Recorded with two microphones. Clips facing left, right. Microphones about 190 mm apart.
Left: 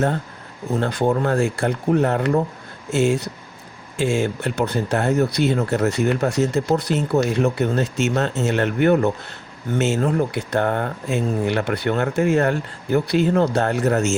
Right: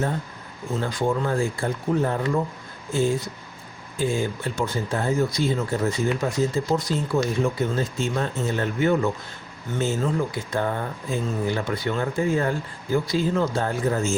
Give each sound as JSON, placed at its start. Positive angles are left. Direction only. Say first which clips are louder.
{"t": 0.8, "sound": "speech", "louder": "left 4 dB", "side_deg": 65}